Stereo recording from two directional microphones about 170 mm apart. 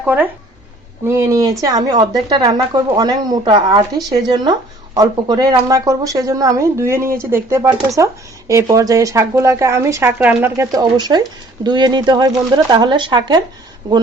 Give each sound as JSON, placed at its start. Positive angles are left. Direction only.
{"t": 0.0, "sound": "speech", "side_deg": -10}